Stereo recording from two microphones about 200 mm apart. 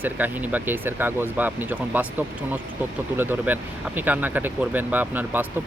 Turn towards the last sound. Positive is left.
turn(degrees=-10)  # may be behind; listen again after turning